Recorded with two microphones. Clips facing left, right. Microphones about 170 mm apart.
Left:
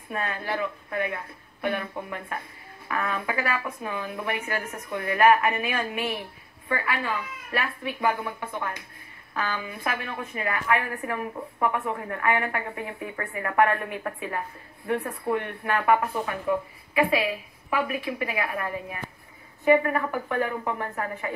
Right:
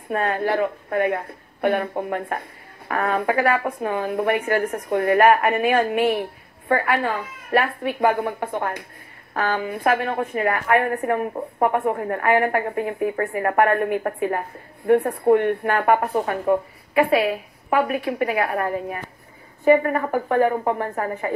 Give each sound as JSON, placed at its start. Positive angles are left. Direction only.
{"t": 0.1, "sound": "a woman's voice", "side_deg": -55}